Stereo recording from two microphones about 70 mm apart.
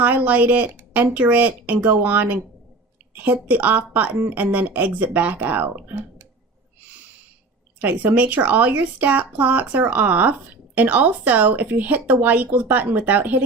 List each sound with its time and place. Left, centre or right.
0.0 s speech: right
3.5 s speech: right
7.8 s speech: right